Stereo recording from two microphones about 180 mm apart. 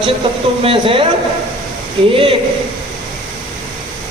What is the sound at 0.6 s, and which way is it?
Speech, 30° right (ahead or behind).